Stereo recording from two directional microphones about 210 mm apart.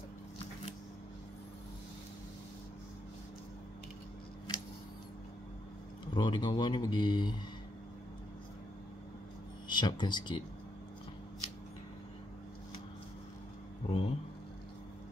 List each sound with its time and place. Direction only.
6.1 s speech: 20° left (ahead or behind)
9.7 s speech: 20° left (ahead or behind)
13.8 s speech: 25° left (ahead or behind)